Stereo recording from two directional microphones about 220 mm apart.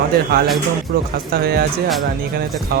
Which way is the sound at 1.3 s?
45° right (ahead or behind).